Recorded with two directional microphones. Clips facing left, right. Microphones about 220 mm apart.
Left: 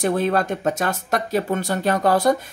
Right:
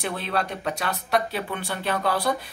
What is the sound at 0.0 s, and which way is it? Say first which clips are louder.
Speech: left 8 dB; 45° left (ahead or behind).